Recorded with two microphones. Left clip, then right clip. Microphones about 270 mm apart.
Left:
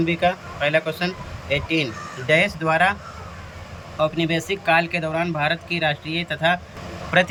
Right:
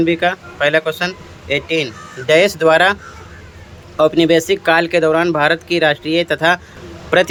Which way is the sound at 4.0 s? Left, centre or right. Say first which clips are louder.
Right 10 dB; centre.